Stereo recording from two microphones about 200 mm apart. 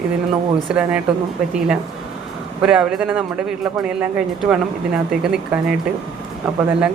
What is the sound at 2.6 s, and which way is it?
Speech, 5° right (ahead or behind).